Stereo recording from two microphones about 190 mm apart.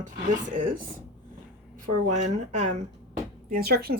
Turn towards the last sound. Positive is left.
turn(degrees=-55)  # may be behind; listen again after turning